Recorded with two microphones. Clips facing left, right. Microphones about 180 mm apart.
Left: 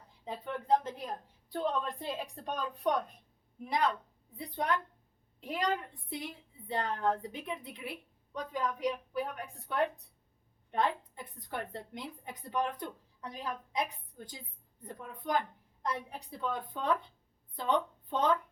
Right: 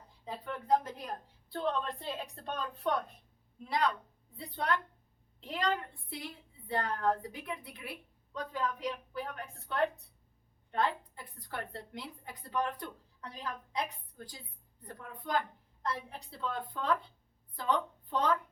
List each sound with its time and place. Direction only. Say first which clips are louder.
0.4 s a woman's voice: left 1 dB; 20° left (ahead or behind)